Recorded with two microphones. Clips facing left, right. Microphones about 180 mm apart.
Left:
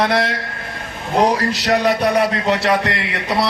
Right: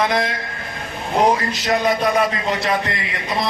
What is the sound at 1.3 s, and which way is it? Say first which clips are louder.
A man's voice: left 3 dB; 75° left (ahead or behind).